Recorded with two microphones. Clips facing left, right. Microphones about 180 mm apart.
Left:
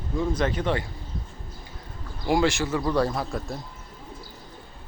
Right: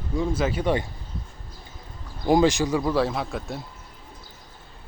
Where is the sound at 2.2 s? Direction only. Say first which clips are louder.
Right 4 dB; 20° right (ahead or behind).